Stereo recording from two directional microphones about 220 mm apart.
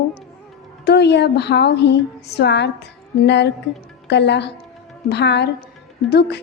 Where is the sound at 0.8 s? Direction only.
50° left (ahead or behind).